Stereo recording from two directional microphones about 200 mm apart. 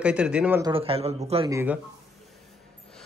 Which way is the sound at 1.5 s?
10° right (ahead or behind).